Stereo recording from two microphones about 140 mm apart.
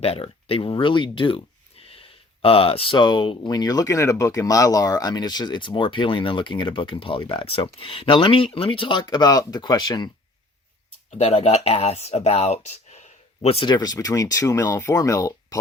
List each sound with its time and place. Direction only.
0.0 s speech: 45° left (ahead or behind)
11.3 s speech: 45° left (ahead or behind)
13.7 s speech: 30° left (ahead or behind)